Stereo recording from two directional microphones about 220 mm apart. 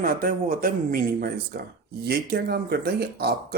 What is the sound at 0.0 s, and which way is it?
Speech, 40° right (ahead or behind).